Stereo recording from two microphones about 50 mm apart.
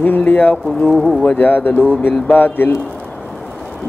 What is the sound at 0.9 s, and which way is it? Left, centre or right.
Speech, centre.